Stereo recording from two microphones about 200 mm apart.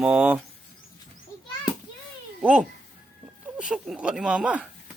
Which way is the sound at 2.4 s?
5° right (ahead or behind).